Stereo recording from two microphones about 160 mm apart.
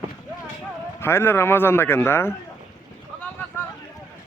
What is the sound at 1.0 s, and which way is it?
Speech, 15° left (ahead or behind).